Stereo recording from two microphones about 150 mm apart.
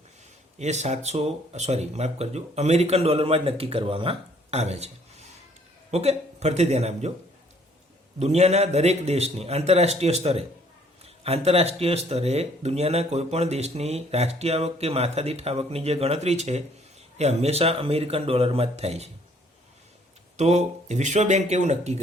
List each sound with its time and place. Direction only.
0.6 s speech: 50° right (ahead or behind)
8.2 s speech: 45° right (ahead or behind)
20.3 s speech: 50° right (ahead or behind)